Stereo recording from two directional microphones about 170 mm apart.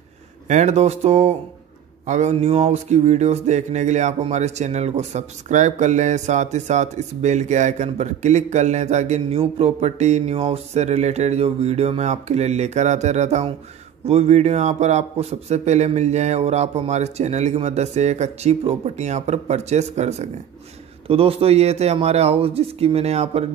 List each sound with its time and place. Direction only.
0.5 s music: 45° right (ahead or behind)